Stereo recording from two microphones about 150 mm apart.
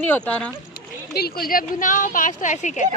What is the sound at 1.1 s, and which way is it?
A woman's voice, 90° left.